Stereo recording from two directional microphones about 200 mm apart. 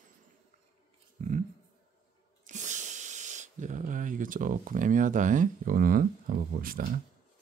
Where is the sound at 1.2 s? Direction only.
40° right (ahead or behind).